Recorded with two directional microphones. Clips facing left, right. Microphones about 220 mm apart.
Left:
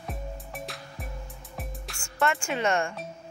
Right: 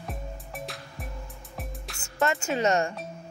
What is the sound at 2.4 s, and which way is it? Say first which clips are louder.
Speech: right 2 dB; 40° right (ahead or behind).